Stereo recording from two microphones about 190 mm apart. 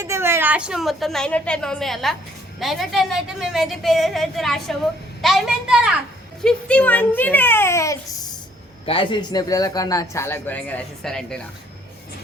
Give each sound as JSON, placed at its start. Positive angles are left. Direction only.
{"t": 0.0, "sound": "a woman's voice", "side_deg": -15}
{"t": 8.9, "sound": "a man's voice", "side_deg": 25}